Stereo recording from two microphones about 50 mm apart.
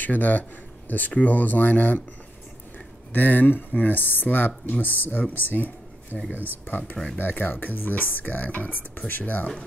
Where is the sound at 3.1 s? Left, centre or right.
Left.